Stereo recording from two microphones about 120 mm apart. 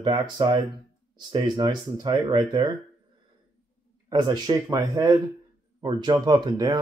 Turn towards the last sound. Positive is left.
turn(degrees=-35)  # may be behind; listen again after turning